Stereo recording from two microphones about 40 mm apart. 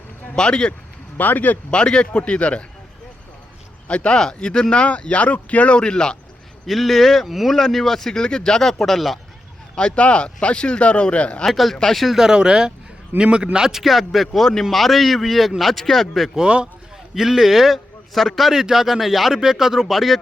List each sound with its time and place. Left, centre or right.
0.3 s speech: left
1.1 s speech: left
1.7 s speech: left
3.8 s speech: left
4.2 s speech: centre
6.7 s speech: centre
9.7 s speech: left
11.5 s speech: centre
12.1 s a man's voice: centre
13.8 s speech: centre
17.2 s a man's voice: centre
18.6 s a man's voice: centre